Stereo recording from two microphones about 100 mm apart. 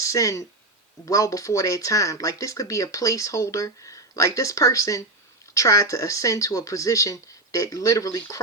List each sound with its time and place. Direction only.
0.0 s speech: 35° left (ahead or behind)